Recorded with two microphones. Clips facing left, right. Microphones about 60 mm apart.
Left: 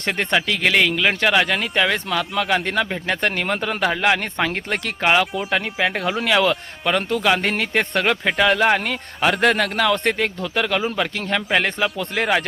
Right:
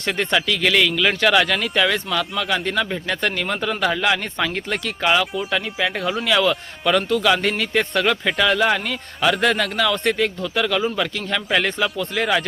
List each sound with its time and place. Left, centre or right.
0.0 s a man's voice: left
1.9 s a man's voice: left
6.2 s a man's voice: left